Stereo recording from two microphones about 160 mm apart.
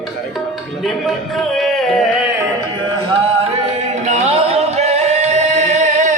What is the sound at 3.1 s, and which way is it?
Music, 40° right (ahead or behind).